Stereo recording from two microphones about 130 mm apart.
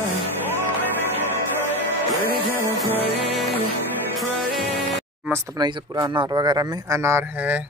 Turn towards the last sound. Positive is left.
turn(degrees=-20)  # may be behind; listen again after turning